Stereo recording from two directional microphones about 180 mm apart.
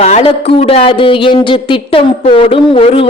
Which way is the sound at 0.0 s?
35° left (ahead or behind).